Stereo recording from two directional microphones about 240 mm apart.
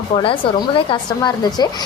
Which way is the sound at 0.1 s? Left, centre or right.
Left.